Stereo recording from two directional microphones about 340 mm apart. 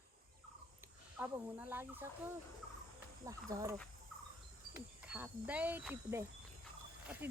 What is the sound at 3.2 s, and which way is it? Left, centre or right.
Speech, centre.